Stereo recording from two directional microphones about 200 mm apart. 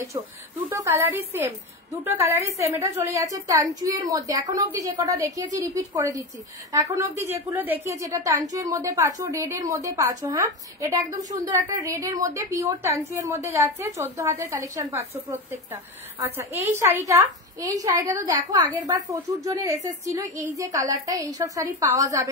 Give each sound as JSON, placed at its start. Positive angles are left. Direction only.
{"t": 0.1, "sound": "a woman's voice", "side_deg": -15}